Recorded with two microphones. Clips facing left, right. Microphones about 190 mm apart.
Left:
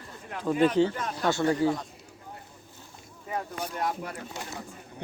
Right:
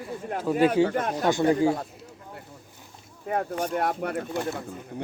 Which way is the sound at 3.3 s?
60° right (ahead or behind).